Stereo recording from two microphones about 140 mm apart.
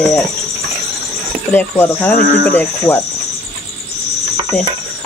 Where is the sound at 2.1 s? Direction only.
80° left.